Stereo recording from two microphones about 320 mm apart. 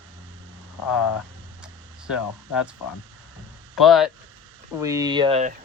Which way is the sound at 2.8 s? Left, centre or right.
Left.